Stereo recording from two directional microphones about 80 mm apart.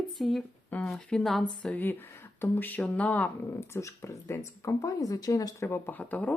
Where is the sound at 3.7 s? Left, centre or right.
Left.